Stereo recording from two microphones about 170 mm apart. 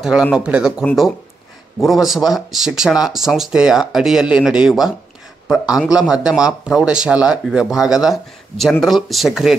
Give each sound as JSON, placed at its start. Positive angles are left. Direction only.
{"t": 0.0, "sound": "speech", "side_deg": -5}